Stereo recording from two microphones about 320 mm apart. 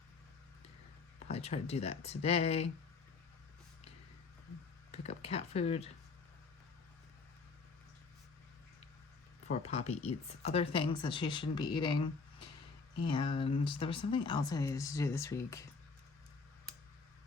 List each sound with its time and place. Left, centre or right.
1.3 s speech: centre
4.9 s speech: centre
9.5 s speech: centre
13.0 s speech: centre